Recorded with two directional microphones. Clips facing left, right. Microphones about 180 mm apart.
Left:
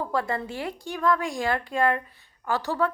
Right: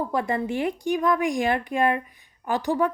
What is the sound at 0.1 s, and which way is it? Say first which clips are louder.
A woman's voice: right 3 dB; 20° right (ahead or behind).